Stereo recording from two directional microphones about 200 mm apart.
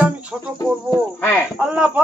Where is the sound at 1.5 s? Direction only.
5° right (ahead or behind).